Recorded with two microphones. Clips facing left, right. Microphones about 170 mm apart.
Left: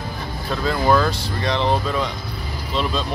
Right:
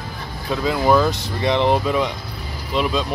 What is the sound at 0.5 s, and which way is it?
Speech, 10° right (ahead or behind).